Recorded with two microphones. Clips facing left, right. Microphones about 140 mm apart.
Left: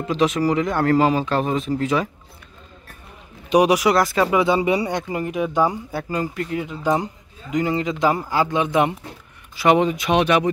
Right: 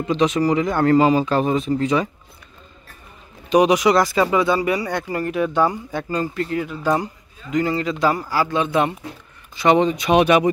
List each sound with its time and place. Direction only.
0.1 s speech: centre (ahead or behind)
3.4 s speech: 10° left (ahead or behind)
4.4 s speech: 20° left (ahead or behind)
9.6 s speech: 5° left (ahead or behind)
10.1 s speech: 10° right (ahead or behind)